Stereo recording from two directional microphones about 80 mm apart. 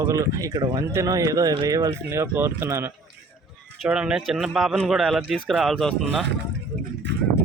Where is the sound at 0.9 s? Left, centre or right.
Right.